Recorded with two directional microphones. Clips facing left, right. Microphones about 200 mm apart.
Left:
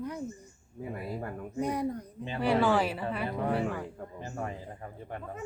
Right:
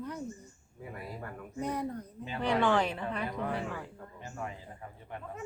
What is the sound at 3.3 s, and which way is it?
Speech, 35° left (ahead or behind).